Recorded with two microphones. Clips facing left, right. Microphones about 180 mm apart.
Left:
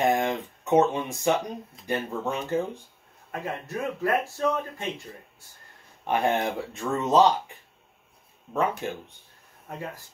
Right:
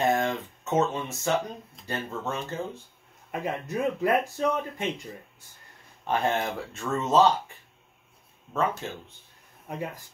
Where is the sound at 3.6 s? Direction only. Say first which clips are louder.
Right 2 dB; 15° right (ahead or behind).